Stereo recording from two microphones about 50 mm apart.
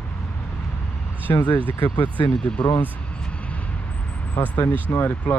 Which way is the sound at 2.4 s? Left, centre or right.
Left.